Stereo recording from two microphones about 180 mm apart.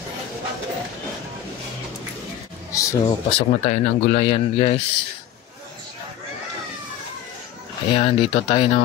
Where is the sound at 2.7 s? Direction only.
15° left (ahead or behind).